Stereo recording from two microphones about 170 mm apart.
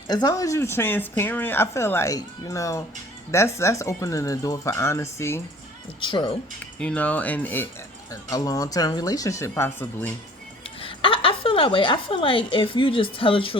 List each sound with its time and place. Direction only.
0.1 s speech: 20° left (ahead or behind)
6.1 s speech: 25° left (ahead or behind)
6.7 s speech: 5° left (ahead or behind)
10.8 s a woman's voice: 30° left (ahead or behind)